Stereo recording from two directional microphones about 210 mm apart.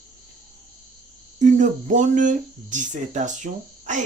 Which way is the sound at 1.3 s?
35° right (ahead or behind).